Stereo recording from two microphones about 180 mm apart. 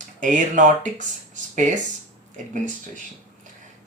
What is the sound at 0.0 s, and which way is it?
Speech, 45° right (ahead or behind).